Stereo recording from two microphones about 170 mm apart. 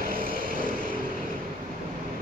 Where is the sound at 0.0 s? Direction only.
60° right (ahead or behind).